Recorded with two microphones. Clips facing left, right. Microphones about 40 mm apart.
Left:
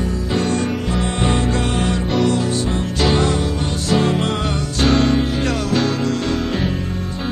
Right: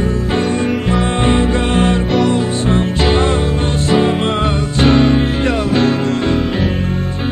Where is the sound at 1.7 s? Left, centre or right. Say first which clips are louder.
Right 5 dB; right.